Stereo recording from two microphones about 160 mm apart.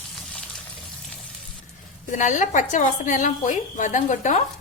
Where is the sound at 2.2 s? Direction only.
50° left (ahead or behind).